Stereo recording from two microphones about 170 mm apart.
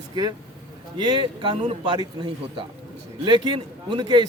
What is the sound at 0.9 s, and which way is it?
A man's voice, 30° right (ahead or behind).